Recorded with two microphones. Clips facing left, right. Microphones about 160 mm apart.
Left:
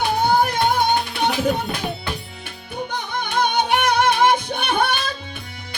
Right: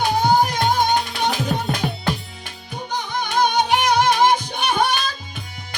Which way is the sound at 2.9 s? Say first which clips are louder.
Right 3 dB; 55° left (ahead or behind).